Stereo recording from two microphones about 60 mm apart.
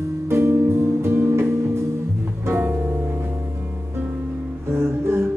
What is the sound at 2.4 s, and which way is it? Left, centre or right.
Music, right.